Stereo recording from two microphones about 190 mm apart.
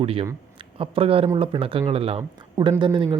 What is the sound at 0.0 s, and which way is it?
Speech, 30° right (ahead or behind).